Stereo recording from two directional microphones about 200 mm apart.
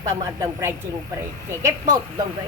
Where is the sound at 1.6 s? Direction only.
15° right (ahead or behind).